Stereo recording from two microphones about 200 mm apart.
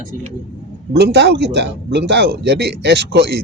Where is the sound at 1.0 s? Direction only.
55° right (ahead or behind).